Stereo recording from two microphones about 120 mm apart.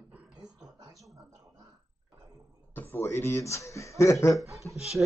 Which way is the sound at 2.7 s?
15° left (ahead or behind).